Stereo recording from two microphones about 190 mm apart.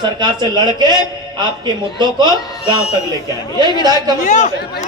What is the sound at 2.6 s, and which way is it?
Speech, 30° left (ahead or behind).